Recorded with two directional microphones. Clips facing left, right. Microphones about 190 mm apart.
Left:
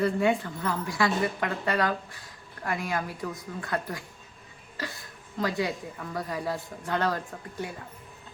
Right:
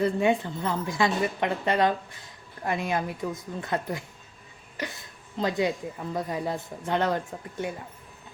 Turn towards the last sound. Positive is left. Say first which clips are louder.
# right 3 dB
turn(degrees=-20)  # may be behind; listen again after turning